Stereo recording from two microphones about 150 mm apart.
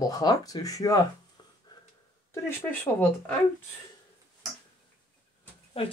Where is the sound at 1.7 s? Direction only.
25° left (ahead or behind).